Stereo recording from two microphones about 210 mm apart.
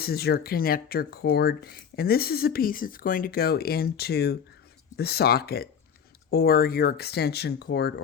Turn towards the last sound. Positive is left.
turn(degrees=50)  # may be behind; listen again after turning